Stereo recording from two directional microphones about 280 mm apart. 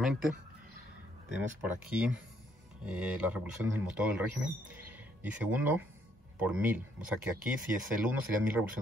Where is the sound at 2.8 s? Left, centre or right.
Centre.